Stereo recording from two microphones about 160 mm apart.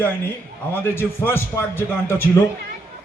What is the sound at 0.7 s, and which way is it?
Speech, 15° left (ahead or behind).